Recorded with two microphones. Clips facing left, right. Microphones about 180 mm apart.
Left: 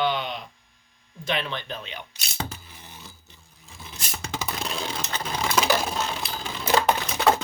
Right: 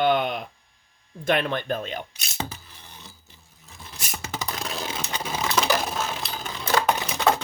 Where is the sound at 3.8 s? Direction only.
Centre (ahead or behind).